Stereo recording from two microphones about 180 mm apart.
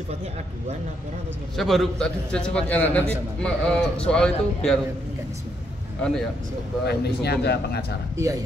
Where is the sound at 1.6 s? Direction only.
Centre (ahead or behind).